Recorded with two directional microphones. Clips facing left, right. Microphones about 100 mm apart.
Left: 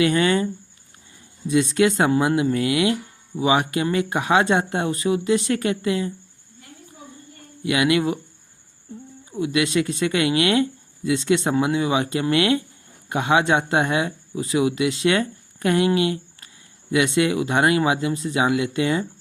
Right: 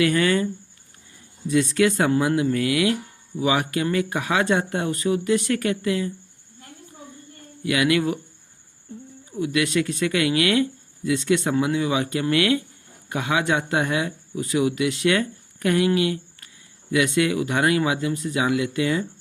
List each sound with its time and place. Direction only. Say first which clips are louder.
0.0 s speech: left 1 dB; 25° left (ahead or behind)
1.5 s speech: left 1 dB; 20° left (ahead or behind)
7.6 s speech: left 1 dB; 25° left (ahead or behind)
9.4 s speech: left 1 dB; 25° left (ahead or behind)